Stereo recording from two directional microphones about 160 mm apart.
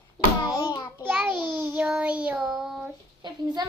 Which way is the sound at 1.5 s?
15° right (ahead or behind).